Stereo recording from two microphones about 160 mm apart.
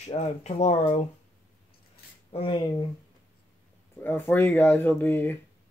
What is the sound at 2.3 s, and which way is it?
Speech, 30° left (ahead or behind).